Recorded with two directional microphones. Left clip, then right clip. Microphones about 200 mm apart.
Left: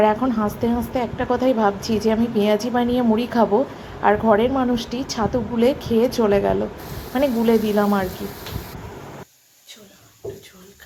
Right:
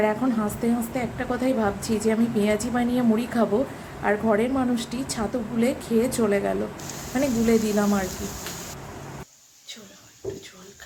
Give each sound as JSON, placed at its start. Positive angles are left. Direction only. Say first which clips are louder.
{"t": 0.0, "sound": "a woman's voice", "louder": "left 5 dB", "side_deg": 10}